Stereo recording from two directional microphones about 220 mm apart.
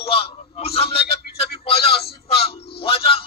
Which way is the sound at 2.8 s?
25° left (ahead or behind).